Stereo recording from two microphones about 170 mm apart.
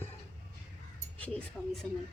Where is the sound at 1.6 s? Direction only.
Centre (ahead or behind).